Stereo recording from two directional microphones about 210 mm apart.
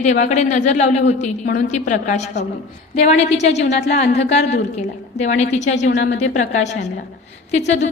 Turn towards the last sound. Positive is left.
turn(degrees=30)  # may be behind; listen again after turning